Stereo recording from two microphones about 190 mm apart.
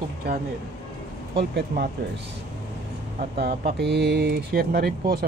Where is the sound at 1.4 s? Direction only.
60° right (ahead or behind).